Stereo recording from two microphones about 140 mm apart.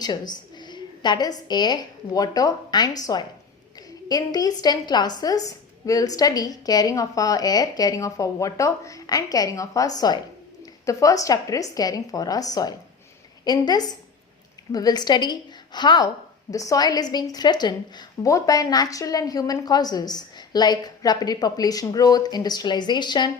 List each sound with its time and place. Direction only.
0.0 s a woman's voice: 30° left (ahead or behind)